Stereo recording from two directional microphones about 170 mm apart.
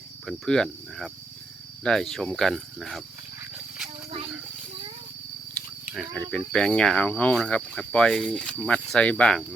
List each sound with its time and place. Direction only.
0.3 s speech: 5° left (ahead or behind)
5.8 s speech: centre (ahead or behind)